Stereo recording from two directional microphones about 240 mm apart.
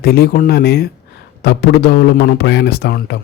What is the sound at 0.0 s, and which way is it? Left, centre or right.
A man's voice, left.